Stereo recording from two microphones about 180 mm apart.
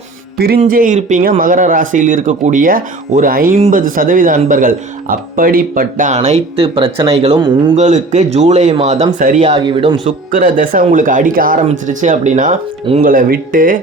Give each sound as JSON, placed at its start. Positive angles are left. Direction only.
{"t": 0.3, "sound": "speech", "side_deg": -60}
{"t": 0.6, "sound": "a man's voice", "side_deg": -45}
{"t": 7.3, "sound": "speech", "side_deg": -25}
{"t": 7.8, "sound": "a man's voice", "side_deg": -40}
{"t": 9.6, "sound": "speech", "side_deg": -25}
{"t": 10.3, "sound": "a man's voice", "side_deg": -50}